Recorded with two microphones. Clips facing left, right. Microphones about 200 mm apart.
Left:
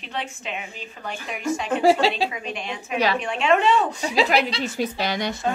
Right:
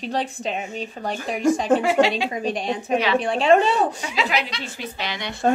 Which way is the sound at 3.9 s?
35° left (ahead or behind).